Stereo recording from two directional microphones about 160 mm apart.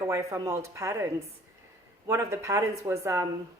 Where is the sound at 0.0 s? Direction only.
20° right (ahead or behind).